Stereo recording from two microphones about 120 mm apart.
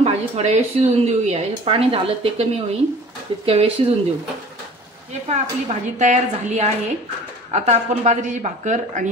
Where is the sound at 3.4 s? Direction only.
55° right (ahead or behind).